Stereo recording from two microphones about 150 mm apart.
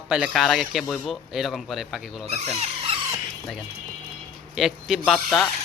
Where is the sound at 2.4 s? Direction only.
40° right (ahead or behind).